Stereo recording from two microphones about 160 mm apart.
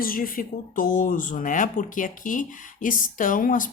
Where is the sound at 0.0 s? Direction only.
60° left (ahead or behind).